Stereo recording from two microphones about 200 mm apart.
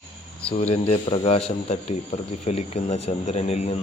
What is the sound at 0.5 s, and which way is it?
Speech, 30° left (ahead or behind).